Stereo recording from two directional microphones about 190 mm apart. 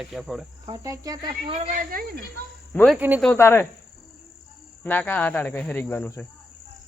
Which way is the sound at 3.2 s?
10° left (ahead or behind).